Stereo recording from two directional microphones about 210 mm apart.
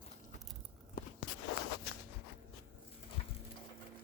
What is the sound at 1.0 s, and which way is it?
Walk, 40° left (ahead or behind).